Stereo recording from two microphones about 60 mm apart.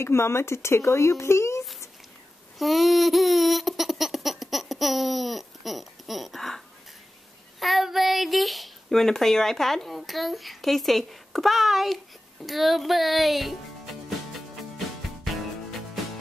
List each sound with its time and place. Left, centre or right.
0.0 s speech: left
2.6 s a sound: centre
7.6 s speech: centre